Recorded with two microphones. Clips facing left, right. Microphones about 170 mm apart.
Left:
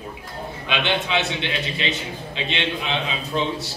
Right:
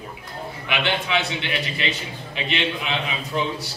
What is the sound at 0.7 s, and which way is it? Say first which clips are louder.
Speech: left 1 dB; 20° left (ahead or behind).